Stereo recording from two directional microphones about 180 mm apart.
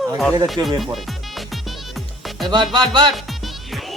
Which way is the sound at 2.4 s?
25° right (ahead or behind).